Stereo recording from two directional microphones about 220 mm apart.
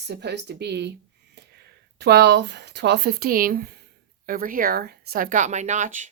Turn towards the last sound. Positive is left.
turn(degrees=-35)  # may be behind; listen again after turning